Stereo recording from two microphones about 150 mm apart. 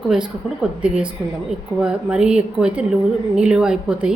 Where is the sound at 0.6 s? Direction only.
5° right (ahead or behind).